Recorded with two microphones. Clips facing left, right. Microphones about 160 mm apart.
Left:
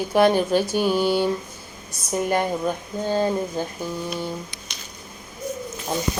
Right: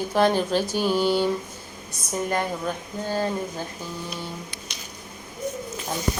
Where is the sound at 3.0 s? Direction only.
20° left (ahead or behind).